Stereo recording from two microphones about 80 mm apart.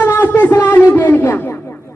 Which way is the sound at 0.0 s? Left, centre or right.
Left.